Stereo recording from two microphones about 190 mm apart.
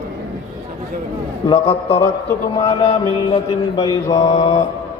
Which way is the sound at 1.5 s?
25° left (ahead or behind).